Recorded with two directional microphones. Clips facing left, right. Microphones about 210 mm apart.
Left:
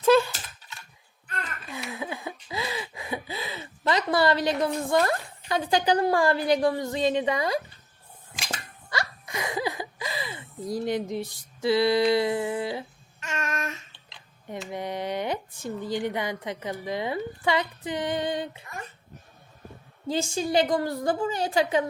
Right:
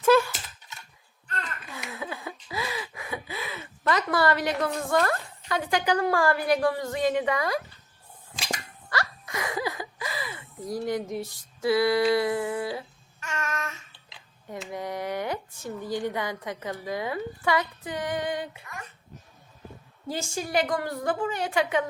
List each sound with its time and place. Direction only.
0.0 s typing: 25° left (ahead or behind)
1.9 s a sound: 20° left (ahead or behind)
4.6 s speech: 20° left (ahead or behind)
8.9 s a sound: 20° left (ahead or behind)
14.7 s speech: 20° left (ahead or behind)
20.1 s a woman's voice: 20° left (ahead or behind)